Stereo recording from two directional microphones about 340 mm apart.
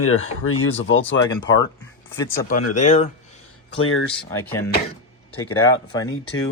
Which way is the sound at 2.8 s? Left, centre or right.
Centre.